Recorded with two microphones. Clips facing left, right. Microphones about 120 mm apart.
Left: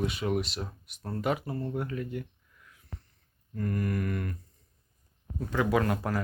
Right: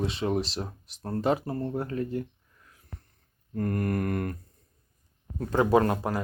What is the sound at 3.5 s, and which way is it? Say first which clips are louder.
Mantra: right 3 dB; 50° right (ahead or behind).